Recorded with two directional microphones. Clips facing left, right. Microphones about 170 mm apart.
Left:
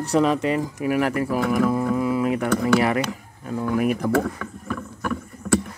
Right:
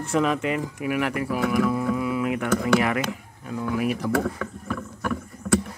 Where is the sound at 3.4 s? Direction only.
45° left (ahead or behind).